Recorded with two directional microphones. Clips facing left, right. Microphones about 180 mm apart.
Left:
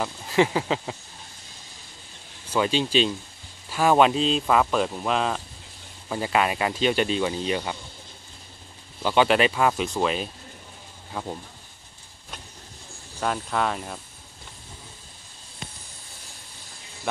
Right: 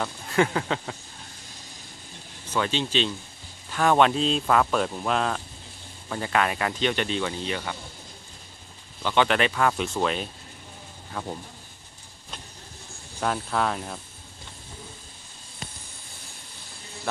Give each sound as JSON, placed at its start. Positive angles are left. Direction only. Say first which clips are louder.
{"t": 0.0, "sound": "speech", "louder": "left 2 dB", "side_deg": 5}
{"t": 2.5, "sound": "speech", "louder": "left 3 dB", "side_deg": 10}
{"t": 6.0, "sound": "speech", "louder": "left 2 dB", "side_deg": 15}
{"t": 9.0, "sound": "speech", "louder": "left 3 dB", "side_deg": 10}
{"t": 13.2, "sound": "speech", "louder": "even", "side_deg": 0}